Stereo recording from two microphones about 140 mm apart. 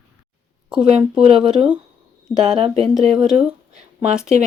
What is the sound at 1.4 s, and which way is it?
Speech, 5° right (ahead or behind).